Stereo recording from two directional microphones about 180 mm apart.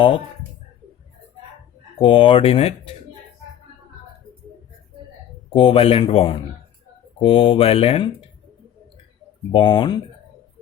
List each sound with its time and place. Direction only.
2.0 s speech: 30° left (ahead or behind)
5.5 s speech: 30° left (ahead or behind)
9.5 s speech: 25° left (ahead or behind)